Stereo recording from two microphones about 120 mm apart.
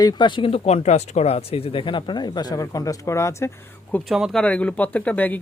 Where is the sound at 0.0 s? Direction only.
35° left (ahead or behind).